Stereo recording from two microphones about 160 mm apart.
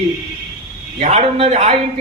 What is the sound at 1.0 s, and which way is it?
Speech, 40° right (ahead or behind).